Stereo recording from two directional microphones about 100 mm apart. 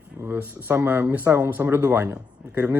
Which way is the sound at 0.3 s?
20° right (ahead or behind).